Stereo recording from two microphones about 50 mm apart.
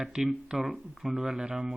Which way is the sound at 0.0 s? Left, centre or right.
Centre.